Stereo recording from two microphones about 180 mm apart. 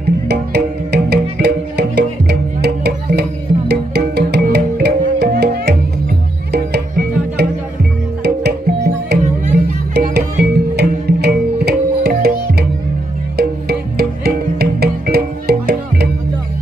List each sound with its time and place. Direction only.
0.3 s music: 65° right (ahead or behind)
8.2 s music: 65° right (ahead or behind)
9.2 s music: 45° right (ahead or behind)
10.0 s music: 55° right (ahead or behind)